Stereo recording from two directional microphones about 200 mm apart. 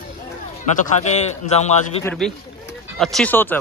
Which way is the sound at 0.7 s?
40° left (ahead or behind).